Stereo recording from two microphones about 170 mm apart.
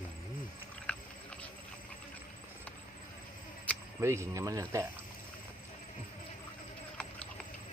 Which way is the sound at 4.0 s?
15° right (ahead or behind).